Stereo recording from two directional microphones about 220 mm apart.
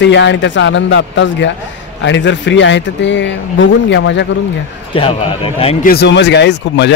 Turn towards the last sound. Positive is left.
turn(degrees=50)  # may be behind; listen again after turning